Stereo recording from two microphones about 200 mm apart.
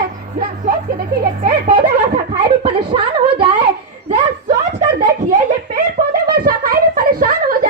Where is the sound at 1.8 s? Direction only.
25° right (ahead or behind).